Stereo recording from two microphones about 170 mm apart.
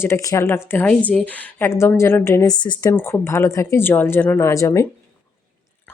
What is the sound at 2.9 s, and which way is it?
A woman's voice, 15° left (ahead or behind).